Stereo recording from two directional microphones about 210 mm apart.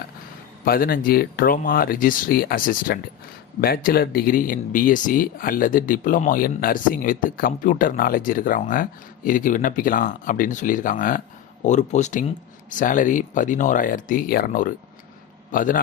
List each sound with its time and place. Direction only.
0.6 s speech: 45° left (ahead or behind)